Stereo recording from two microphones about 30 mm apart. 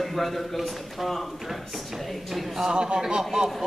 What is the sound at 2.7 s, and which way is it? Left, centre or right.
Speech, right.